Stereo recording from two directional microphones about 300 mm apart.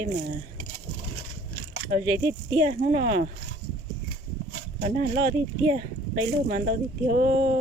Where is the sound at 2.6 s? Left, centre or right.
Right.